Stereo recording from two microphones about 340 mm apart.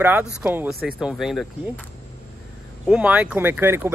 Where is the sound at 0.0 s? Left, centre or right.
Centre.